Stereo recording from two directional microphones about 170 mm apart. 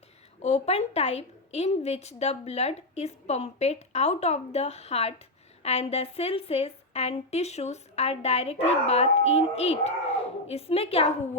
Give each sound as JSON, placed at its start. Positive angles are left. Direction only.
{"t": 0.4, "sound": "a woman's voice", "side_deg": 40}